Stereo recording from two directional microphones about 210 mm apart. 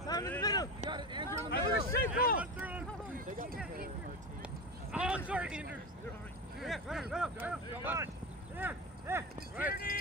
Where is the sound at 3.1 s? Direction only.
40° right (ahead or behind).